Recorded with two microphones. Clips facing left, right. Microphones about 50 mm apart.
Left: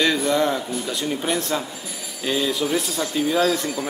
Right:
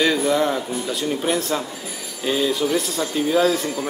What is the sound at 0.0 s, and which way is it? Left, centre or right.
A man's voice, centre.